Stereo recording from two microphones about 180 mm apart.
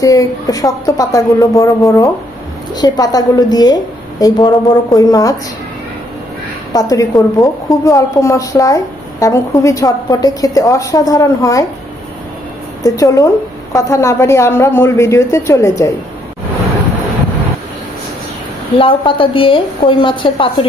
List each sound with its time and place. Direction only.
0.0 s a woman's voice: 20° left (ahead or behind)
6.7 s a woman's voice: 20° left (ahead or behind)
12.8 s a woman's voice: 20° left (ahead or behind)
18.8 s a woman's voice: 30° left (ahead or behind)